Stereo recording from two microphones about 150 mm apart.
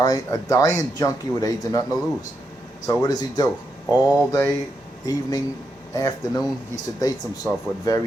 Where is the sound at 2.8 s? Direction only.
25° left (ahead or behind).